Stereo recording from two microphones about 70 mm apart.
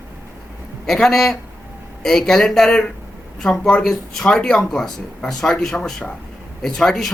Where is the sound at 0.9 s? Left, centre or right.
Centre.